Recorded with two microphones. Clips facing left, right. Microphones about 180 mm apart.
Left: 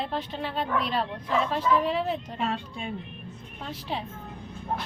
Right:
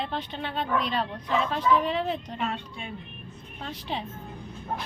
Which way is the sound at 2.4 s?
35° left (ahead or behind).